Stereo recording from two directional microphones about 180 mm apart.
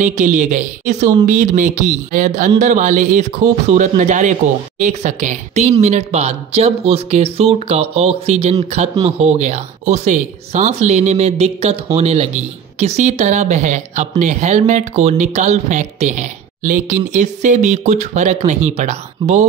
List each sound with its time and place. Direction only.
0.0 s speech: 45° right (ahead or behind)